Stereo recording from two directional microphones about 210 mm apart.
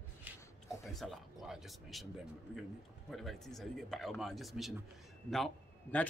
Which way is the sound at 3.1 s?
Centre (ahead or behind).